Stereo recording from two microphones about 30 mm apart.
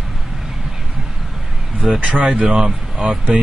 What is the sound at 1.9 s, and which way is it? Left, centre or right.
Speech, right.